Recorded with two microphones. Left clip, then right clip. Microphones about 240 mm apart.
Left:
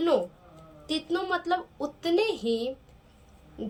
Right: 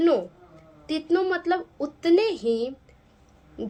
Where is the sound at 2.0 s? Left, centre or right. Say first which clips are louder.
Right 5 dB; centre.